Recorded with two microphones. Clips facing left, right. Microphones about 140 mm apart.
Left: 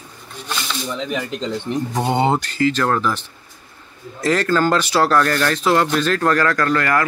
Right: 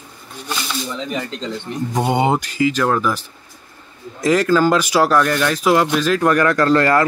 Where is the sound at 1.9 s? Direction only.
10° right (ahead or behind).